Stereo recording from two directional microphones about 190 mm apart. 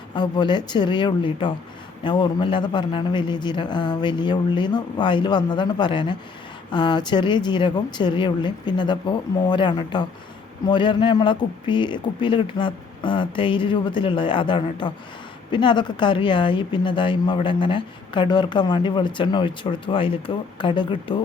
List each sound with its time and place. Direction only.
0.1 s a woman's voice: 25° left (ahead or behind)